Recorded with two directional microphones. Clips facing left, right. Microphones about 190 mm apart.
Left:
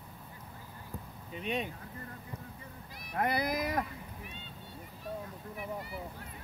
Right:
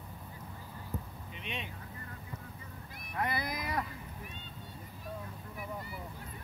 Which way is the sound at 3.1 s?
50° left (ahead or behind).